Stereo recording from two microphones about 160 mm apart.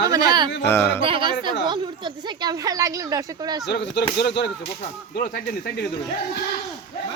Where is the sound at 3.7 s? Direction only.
90° left.